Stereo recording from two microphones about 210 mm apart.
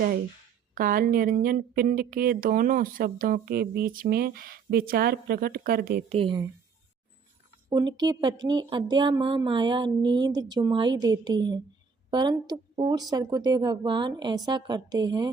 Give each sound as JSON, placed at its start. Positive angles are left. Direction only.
{"t": 0.7, "sound": "speech", "side_deg": -40}
{"t": 6.1, "sound": "speech", "side_deg": -25}
{"t": 7.7, "sound": "speech", "side_deg": -20}